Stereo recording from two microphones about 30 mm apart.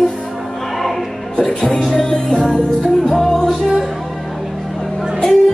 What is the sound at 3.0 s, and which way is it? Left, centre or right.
Music, centre.